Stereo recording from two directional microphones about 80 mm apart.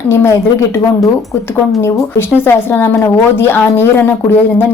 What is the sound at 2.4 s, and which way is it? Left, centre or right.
A woman's voice, left.